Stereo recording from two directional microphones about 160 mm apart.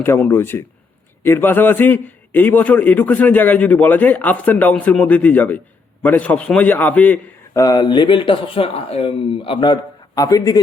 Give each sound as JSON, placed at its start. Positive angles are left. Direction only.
{"t": 0.0, "sound": "a man's voice", "side_deg": 15}
{"t": 7.6, "sound": "speech", "side_deg": 25}